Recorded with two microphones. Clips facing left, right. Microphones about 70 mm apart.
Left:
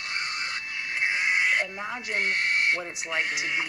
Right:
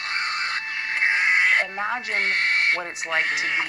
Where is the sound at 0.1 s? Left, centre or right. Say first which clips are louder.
Right 6 dB; right.